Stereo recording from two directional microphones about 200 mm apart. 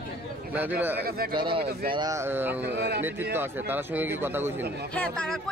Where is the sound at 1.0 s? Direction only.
50° right (ahead or behind).